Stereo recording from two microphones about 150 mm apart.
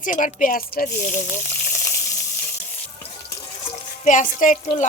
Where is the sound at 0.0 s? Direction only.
60° left (ahead or behind); by 0.9 s 75° left (ahead or behind).